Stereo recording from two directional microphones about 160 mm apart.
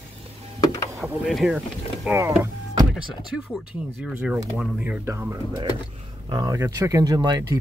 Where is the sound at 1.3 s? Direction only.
Centre (ahead or behind).